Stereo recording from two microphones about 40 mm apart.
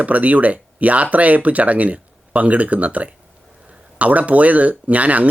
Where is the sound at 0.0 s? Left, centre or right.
Right.